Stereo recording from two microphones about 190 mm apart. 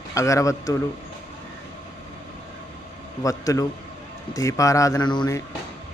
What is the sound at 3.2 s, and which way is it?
A man's voice, 15° left (ahead or behind).